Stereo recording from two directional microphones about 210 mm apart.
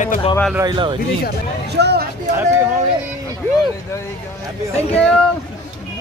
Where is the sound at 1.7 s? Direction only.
50° right (ahead or behind).